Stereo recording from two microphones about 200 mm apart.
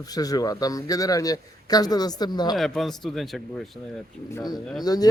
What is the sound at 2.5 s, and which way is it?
Speech, centre (ahead or behind).